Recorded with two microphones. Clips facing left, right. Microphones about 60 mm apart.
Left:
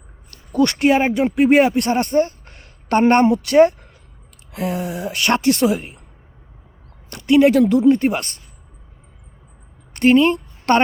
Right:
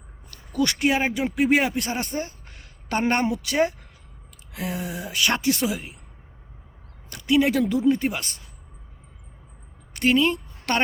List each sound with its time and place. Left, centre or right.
0.3 s a woman's voice: left
7.1 s a woman's voice: left
9.9 s a sound: left